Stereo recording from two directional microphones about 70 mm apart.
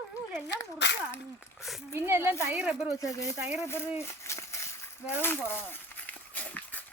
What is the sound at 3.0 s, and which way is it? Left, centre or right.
Speech, left.